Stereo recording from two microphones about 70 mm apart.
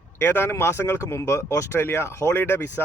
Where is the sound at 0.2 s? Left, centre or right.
Left.